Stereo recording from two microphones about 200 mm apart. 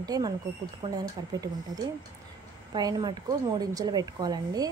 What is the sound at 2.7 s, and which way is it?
Speech, 20° right (ahead or behind).